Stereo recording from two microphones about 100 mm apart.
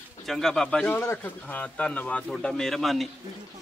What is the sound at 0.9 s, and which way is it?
A man's voice, 20° left (ahead or behind).